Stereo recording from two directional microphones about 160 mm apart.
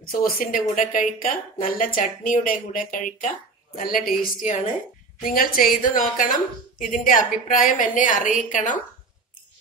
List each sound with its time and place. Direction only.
0.0 s a woman's voice: 65° left (ahead or behind)